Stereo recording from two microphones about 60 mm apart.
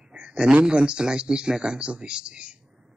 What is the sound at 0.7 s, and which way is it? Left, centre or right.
A man's voice, centre.